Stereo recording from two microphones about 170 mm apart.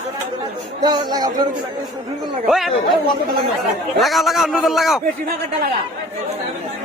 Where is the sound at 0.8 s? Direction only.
25° right (ahead or behind).